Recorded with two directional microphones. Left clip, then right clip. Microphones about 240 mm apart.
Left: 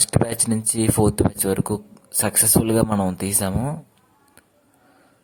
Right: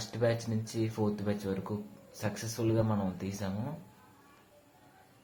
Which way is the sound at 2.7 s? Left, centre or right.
Left.